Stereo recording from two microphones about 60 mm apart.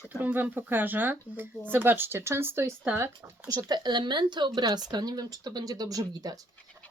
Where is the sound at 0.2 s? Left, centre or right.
Right.